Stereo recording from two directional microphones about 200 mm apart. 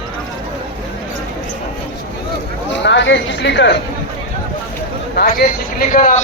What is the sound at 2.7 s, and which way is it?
Speech, 60° left (ahead or behind).